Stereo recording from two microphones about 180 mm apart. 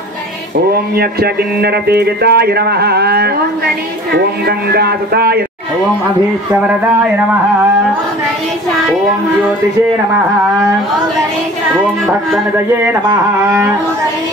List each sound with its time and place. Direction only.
0.9 s speech: 60° right (ahead or behind)
12.8 s speech: 15° right (ahead or behind)